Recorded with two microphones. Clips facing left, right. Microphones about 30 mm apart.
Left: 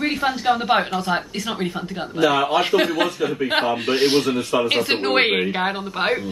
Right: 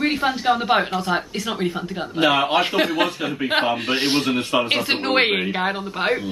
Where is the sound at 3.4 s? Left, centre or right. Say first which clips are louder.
Right 1 dB; right.